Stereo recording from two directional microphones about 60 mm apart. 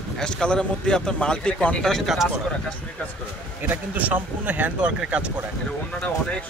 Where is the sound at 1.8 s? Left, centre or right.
Centre.